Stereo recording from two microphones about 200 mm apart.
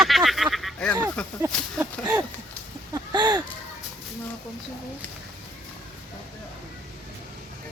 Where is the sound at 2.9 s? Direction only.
20° right (ahead or behind).